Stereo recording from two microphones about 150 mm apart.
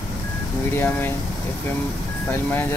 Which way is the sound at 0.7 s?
15° left (ahead or behind).